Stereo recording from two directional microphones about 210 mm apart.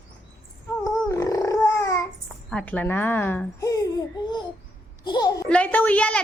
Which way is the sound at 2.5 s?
5° left (ahead or behind).